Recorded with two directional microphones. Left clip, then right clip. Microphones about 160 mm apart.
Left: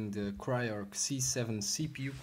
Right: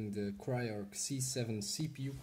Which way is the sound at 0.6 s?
5° right (ahead or behind).